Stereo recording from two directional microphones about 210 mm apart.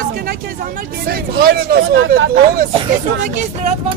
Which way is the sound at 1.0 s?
45° right (ahead or behind).